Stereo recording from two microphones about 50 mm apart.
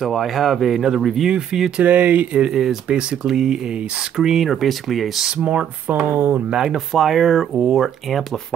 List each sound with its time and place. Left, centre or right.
0.0 s speech: centre
1.8 s speech: right
2.3 s speech: centre
3.3 s speech: centre
5.2 s speech: right
6.0 s speech: right
6.5 s speech: centre
7.5 s speech: centre
7.8 s speech: centre